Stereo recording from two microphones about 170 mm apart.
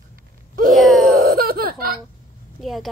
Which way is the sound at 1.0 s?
55° right (ahead or behind).